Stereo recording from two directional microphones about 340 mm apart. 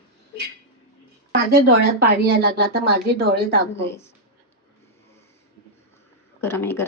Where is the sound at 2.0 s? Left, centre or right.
Right.